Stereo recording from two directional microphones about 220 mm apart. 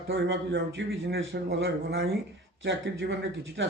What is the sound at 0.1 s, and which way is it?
A man's voice, 50° right (ahead or behind).